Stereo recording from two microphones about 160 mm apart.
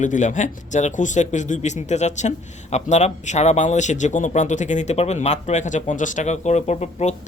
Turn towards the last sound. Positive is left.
turn(degrees=45)  # may be behind; listen again after turning